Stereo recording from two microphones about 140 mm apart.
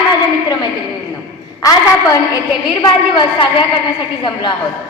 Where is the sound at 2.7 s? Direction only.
35° left (ahead or behind).